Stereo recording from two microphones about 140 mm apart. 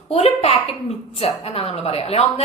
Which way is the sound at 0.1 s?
45° left (ahead or behind).